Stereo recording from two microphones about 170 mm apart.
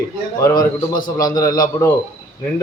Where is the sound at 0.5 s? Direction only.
55° left (ahead or behind).